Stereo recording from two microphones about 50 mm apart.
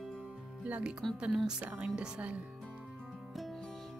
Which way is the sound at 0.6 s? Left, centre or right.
Right.